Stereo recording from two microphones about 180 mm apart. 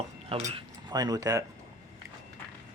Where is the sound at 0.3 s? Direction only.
30° right (ahead or behind).